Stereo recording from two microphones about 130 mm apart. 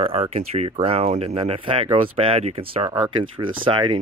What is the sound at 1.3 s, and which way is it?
Speech, 40° right (ahead or behind).